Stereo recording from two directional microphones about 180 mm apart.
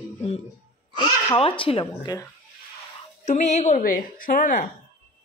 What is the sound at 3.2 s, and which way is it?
A woman's voice, 40° left (ahead or behind).